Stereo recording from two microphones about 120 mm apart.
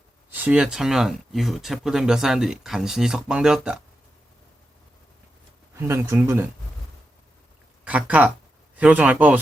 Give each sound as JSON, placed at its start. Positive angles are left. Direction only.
{"t": 0.3, "sound": "speech", "side_deg": -15}
{"t": 5.7, "sound": "speech", "side_deg": -20}
{"t": 7.9, "sound": "speech", "side_deg": -10}